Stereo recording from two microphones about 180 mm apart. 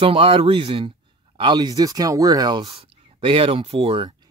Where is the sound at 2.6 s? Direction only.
35° right (ahead or behind).